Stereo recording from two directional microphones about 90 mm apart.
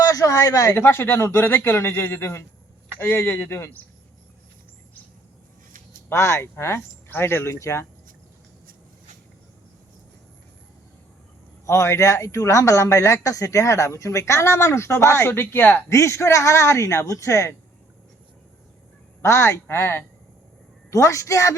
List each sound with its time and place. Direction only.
0.0 s a sound: 40° left (ahead or behind)
0.7 s speech: 25° left (ahead or behind)
6.1 s speech: 30° left (ahead or behind)
11.6 s speech: 30° left (ahead or behind)
19.2 s speech: 30° left (ahead or behind)
20.9 s speech: 35° left (ahead or behind)